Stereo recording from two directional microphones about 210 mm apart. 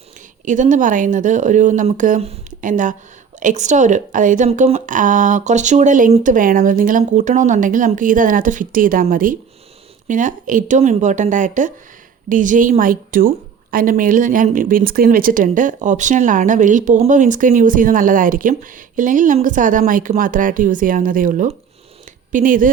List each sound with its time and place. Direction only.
0.4 s a woman's voice: 35° right (ahead or behind)